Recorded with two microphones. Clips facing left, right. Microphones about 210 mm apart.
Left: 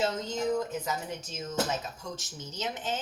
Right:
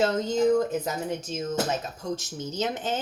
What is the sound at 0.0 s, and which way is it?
Speech, 55° right (ahead or behind).